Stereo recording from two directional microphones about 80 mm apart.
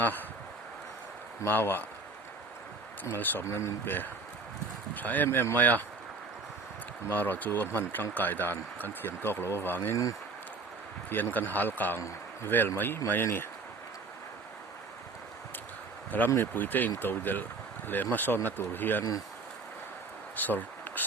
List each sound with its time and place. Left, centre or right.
0.0 s speech: left
1.5 s speech: left
3.0 s speech: left
7.1 s speech: left
9.9 s speech: left
11.1 s speech: left
16.3 s speech: left
20.3 s a sound: left